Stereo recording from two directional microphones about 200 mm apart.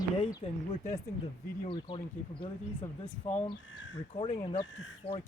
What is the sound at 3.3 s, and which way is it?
Speech, 35° left (ahead or behind).